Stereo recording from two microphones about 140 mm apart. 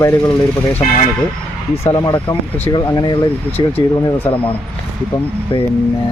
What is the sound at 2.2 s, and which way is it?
Speech, 30° left (ahead or behind).